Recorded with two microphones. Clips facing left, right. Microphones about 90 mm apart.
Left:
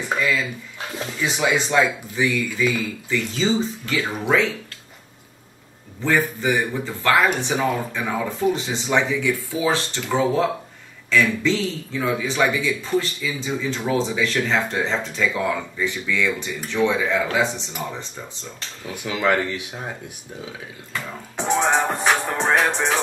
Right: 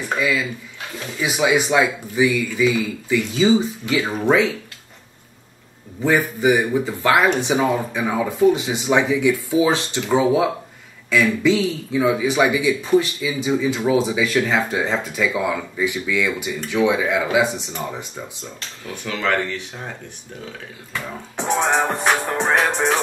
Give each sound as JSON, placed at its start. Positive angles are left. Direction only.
{"t": 1.2, "sound": "a man's voice", "side_deg": -10}
{"t": 6.0, "sound": "a man's voice", "side_deg": -15}
{"t": 19.0, "sound": "speech", "side_deg": 15}
{"t": 20.9, "sound": "music", "side_deg": 0}